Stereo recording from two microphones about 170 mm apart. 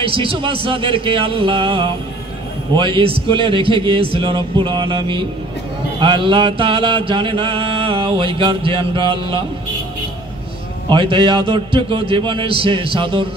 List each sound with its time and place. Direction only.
0.0 s a man's voice: 30° right (ahead or behind)
2.7 s mantra: 30° right (ahead or behind)
10.9 s a man's voice: 30° right (ahead or behind)